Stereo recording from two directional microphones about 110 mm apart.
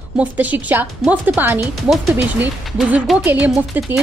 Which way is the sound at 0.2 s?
15° right (ahead or behind).